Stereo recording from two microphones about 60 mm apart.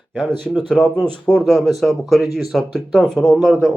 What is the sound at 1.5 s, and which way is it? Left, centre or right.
A man's voice, centre.